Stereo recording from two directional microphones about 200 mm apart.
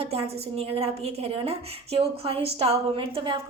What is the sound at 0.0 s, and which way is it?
A woman's voice, 30° right (ahead or behind).